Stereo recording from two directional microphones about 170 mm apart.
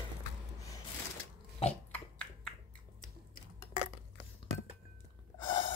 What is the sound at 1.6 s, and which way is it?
Dog, 35° left (ahead or behind).